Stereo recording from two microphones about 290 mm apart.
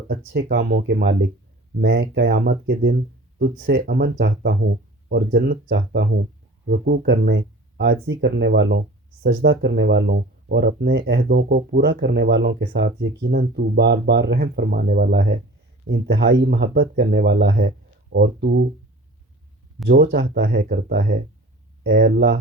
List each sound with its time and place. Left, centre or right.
0.1 s speech: right
19.9 s speech: right